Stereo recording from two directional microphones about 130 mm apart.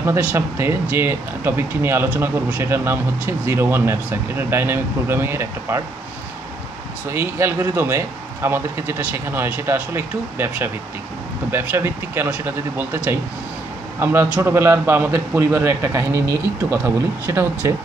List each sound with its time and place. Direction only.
0.0 s speech: 15° right (ahead or behind)
7.1 s a man's voice: 20° right (ahead or behind)